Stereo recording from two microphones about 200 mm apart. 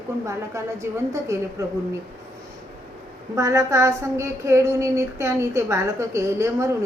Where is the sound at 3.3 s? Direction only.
15° right (ahead or behind).